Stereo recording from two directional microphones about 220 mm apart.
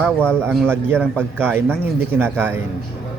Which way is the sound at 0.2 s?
5° left (ahead or behind).